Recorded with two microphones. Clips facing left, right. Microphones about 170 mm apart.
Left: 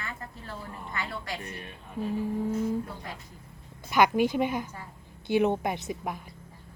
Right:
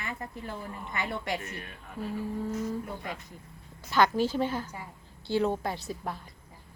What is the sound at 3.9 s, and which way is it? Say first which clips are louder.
A woman's voice: left 2 dB; 15° left (ahead or behind).